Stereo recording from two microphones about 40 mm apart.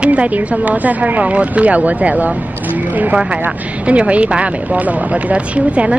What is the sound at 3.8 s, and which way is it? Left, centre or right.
Speech, right.